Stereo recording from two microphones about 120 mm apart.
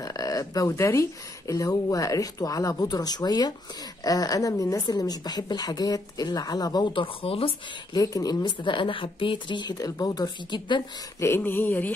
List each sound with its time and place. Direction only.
0.0 s a sound: 30° left (ahead or behind)
1.5 s speech: 30° left (ahead or behind); by 7.5 s 50° left (ahead or behind)
7.9 s speech: 30° left (ahead or behind)
11.1 s speech: 20° left (ahead or behind)